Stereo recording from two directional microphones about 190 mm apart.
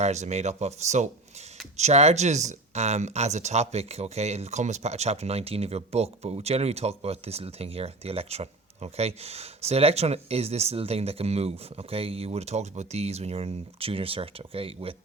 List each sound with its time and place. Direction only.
0.0 s speech: 35° right (ahead or behind)